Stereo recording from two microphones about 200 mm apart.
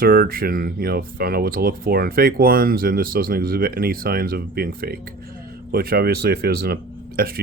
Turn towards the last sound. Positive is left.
turn(degrees=-50)  # may be behind; listen again after turning